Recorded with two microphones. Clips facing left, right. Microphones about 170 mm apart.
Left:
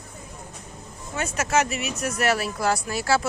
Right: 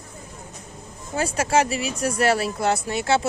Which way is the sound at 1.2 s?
30° right (ahead or behind).